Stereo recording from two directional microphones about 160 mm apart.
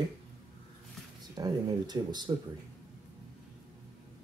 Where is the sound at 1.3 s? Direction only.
25° right (ahead or behind).